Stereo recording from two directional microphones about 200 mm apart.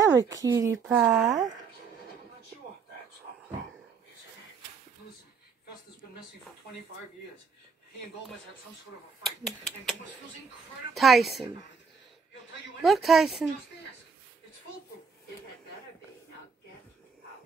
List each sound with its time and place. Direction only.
0.0 s speech: 15° right (ahead or behind)
9.2 s speech: centre (ahead or behind)
11.0 s speech: centre (ahead or behind)
12.8 s speech: centre (ahead or behind)